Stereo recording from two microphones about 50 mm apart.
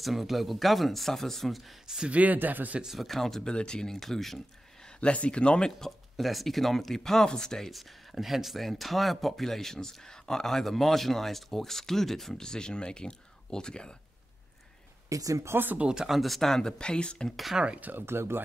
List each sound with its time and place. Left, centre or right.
0.0 s speech: centre
2.0 s speech: right
2.8 s speech: centre
4.8 s speech: left
5.9 s speech: centre
15.0 s speech: right
15.5 s speech: right
15.8 s speech: centre
16.2 s speech: centre
17.5 s speech: centre
17.9 s speech: right